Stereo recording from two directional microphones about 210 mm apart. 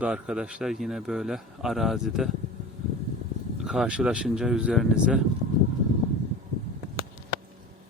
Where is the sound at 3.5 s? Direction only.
Centre (ahead or behind).